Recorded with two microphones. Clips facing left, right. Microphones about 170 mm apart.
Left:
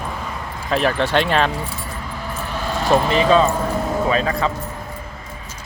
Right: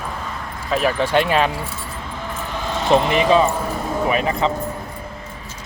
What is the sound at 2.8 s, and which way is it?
Speech, 20° right (ahead or behind).